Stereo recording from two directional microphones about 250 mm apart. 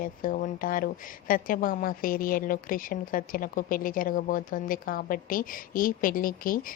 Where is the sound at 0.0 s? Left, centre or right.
Left.